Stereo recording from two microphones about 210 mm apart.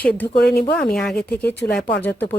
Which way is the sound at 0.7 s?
50° left (ahead or behind).